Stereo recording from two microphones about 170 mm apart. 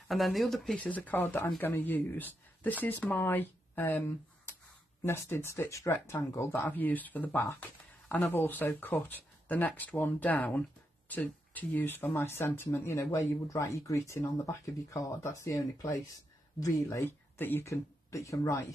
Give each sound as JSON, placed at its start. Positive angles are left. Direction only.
{"t": 0.1, "sound": "speech", "side_deg": 0}
{"t": 5.0, "sound": "speech", "side_deg": 15}